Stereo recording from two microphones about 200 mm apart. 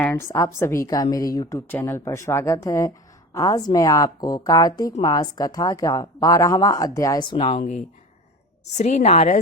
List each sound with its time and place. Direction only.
0.0 s a woman's voice: 10° left (ahead or behind); by 9.4 s 35° left (ahead or behind)